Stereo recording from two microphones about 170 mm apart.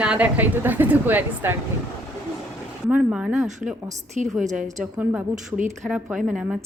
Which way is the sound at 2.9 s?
5° right (ahead or behind).